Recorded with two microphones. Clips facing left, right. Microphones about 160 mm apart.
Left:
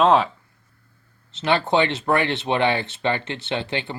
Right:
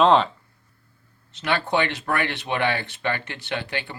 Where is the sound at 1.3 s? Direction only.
25° left (ahead or behind).